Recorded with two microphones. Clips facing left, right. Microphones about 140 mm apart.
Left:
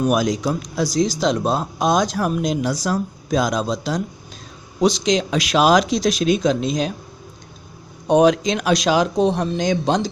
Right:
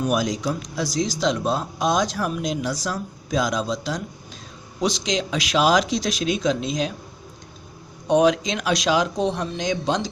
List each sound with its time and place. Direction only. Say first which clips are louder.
0.1 s speech: left 4 dB; 55° left (ahead or behind)
8.0 s speech: left 3 dB; 40° left (ahead or behind)